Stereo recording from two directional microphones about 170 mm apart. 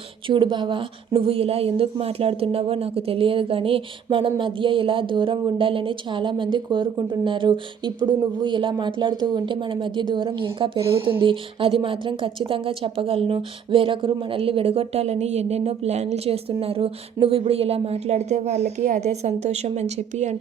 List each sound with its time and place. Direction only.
0.3 s a woman's voice: 30° right (ahead or behind)